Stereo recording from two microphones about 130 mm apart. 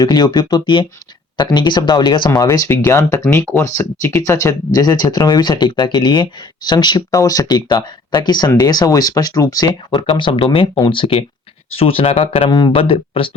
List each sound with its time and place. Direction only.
0.0 s speech: 30° left (ahead or behind); by 12.5 s 45° left (ahead or behind)
12.5 s speech: 30° left (ahead or behind)
12.7 s speech: 45° left (ahead or behind)